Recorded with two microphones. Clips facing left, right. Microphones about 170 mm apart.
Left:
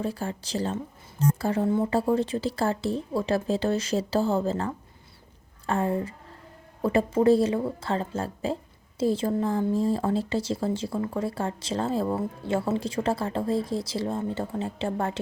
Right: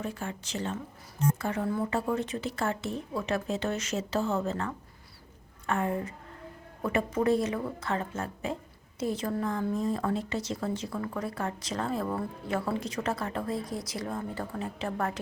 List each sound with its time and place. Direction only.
0.0 s speech: 35° left (ahead or behind)